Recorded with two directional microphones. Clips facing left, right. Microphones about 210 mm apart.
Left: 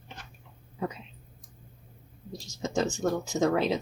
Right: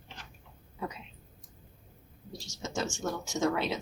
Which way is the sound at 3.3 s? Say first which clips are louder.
Left 3 dB; 35° left (ahead or behind).